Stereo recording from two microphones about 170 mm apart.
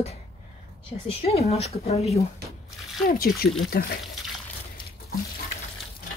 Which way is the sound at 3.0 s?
60° left (ahead or behind).